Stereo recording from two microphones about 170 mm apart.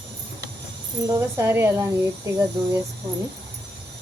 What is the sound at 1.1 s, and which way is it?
Speech, 15° right (ahead or behind).